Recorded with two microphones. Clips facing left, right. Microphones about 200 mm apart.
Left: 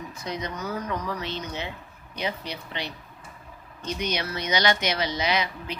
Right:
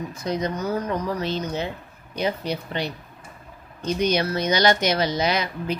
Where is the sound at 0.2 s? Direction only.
40° right (ahead or behind).